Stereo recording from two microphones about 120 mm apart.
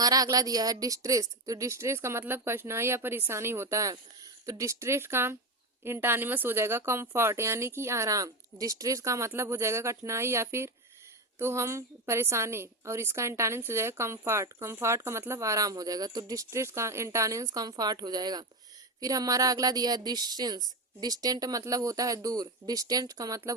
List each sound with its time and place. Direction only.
0.0 s a woman's voice: 30° right (ahead or behind)